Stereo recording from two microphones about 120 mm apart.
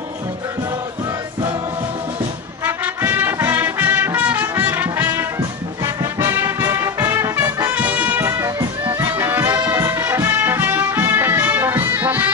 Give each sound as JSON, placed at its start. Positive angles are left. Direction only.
{"t": 2.6, "sound": "music", "side_deg": -15}
{"t": 7.7, "sound": "music", "side_deg": -15}